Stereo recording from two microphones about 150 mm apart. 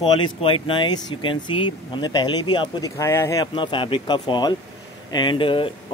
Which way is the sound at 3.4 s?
35° left (ahead or behind).